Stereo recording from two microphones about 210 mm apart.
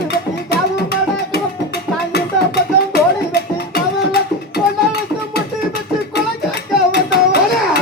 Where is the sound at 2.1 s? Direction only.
50° left (ahead or behind).